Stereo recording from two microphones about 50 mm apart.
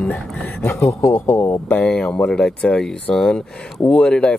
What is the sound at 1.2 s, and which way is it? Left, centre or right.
Speech, left.